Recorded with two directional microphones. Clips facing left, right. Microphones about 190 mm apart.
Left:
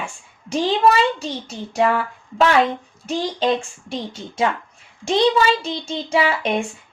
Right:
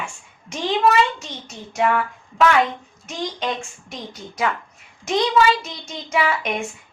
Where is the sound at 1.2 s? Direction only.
30° left (ahead or behind).